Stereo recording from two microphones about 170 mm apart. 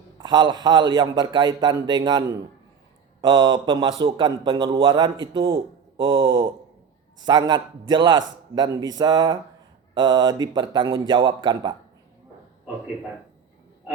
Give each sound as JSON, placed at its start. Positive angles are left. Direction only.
{"t": 0.2, "sound": "a man's voice", "side_deg": -25}